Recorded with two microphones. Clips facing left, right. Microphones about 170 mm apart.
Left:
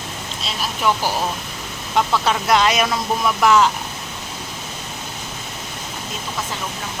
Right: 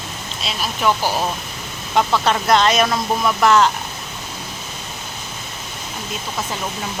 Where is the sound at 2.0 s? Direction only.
5° left (ahead or behind).